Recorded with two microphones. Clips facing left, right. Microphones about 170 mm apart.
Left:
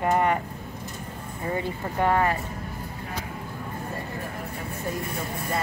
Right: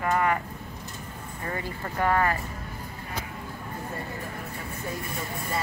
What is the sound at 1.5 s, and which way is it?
Speech, 15° left (ahead or behind).